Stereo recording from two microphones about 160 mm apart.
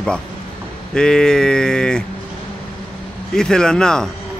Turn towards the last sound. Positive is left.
turn(degrees=5)  # may be behind; listen again after turning